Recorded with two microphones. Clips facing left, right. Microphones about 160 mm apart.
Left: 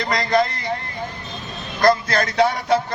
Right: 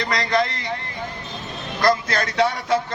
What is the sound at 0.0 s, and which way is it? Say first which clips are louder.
Speech: left 1 dB; 25° left (ahead or behind).